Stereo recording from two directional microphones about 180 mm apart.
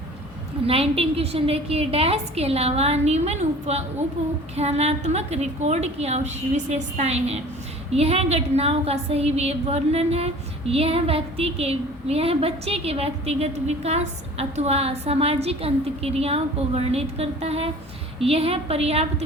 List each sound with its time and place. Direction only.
0.7 s a woman's voice: 30° right (ahead or behind)